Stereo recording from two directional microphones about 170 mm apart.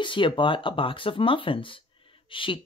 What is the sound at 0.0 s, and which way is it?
Speech, 30° left (ahead or behind).